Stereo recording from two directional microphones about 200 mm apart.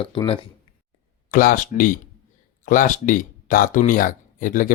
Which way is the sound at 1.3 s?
45° left (ahead or behind).